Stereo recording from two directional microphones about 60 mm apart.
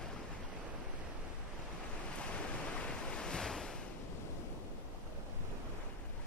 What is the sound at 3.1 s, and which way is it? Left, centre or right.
Waves, centre.